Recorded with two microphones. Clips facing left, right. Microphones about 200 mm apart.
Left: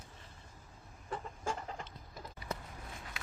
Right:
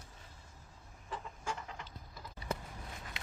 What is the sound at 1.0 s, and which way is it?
Chicken, 45° left (ahead or behind).